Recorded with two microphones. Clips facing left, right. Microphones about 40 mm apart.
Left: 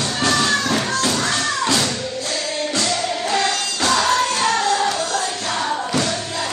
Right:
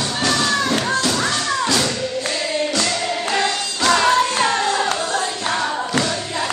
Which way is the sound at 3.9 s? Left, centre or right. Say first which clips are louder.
Right 2 dB; right.